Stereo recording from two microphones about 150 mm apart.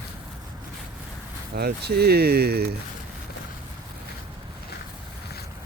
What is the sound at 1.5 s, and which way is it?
Speech, 90° right.